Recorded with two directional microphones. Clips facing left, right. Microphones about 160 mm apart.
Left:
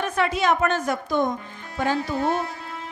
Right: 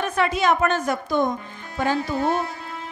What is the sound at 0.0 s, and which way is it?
A woman's voice, 10° right (ahead or behind).